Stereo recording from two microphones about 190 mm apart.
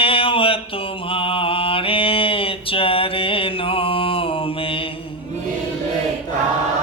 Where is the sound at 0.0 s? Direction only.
30° left (ahead or behind).